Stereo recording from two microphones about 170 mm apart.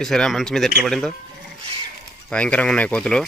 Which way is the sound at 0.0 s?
5° left (ahead or behind).